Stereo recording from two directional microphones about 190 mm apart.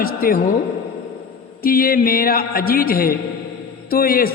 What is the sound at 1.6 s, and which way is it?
A man's voice, 50° left (ahead or behind).